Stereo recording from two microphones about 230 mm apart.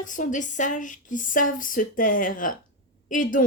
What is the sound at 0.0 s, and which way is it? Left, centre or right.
A woman's voice, left.